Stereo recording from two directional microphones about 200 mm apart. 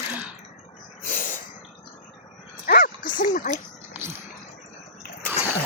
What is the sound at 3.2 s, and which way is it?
Splash, 40° left (ahead or behind).